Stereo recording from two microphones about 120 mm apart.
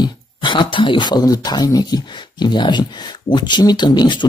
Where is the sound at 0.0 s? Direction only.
40° left (ahead or behind).